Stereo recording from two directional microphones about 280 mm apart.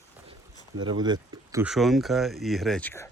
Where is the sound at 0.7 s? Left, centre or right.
Centre.